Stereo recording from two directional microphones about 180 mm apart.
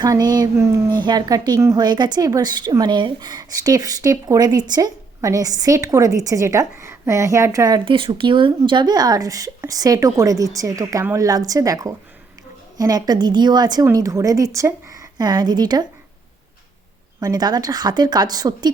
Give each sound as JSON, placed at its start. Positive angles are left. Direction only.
{"t": 0.0, "sound": "a woman's voice", "side_deg": -20}
{"t": 17.2, "sound": "a woman's voice", "side_deg": -20}